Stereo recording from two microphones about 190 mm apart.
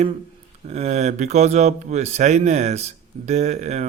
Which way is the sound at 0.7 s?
35° right (ahead or behind).